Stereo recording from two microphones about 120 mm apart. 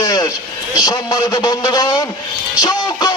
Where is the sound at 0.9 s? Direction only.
35° left (ahead or behind).